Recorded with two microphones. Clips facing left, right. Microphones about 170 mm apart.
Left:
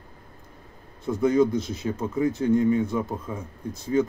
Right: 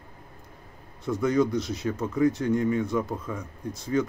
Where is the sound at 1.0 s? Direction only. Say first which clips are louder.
Left 3 dB; 20° left (ahead or behind).